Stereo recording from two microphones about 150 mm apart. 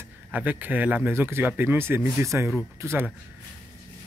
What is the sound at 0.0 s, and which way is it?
Speech, 10° right (ahead or behind).